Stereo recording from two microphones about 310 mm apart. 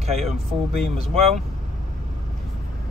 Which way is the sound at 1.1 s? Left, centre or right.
Centre.